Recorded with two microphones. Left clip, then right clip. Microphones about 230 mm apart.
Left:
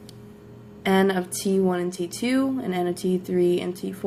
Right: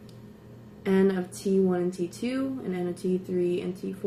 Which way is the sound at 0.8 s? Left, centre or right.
Left.